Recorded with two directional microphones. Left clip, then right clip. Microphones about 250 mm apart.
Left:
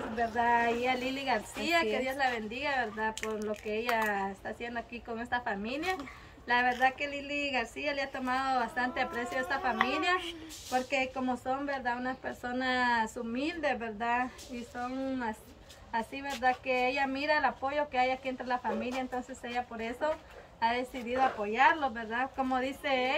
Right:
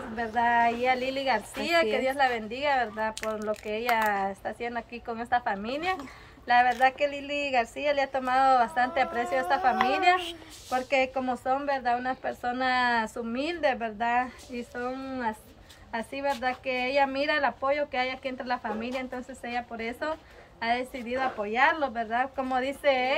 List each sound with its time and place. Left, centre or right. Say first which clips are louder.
0.4 s a woman's voice: right 5 dB; centre
15.9 s a woman's voice: right 5 dB; centre